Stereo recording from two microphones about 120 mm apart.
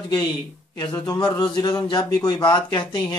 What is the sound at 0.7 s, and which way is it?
A man's voice, 40° left (ahead or behind).